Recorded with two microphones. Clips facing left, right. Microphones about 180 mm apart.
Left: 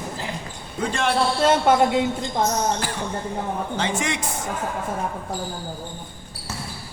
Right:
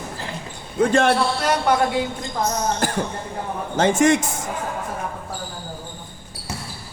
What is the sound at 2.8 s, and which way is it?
A man's voice, 45° right (ahead or behind).